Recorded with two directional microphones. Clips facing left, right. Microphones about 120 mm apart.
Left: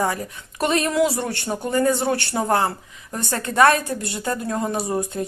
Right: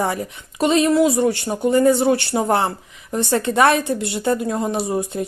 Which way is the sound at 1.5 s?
15° right (ahead or behind).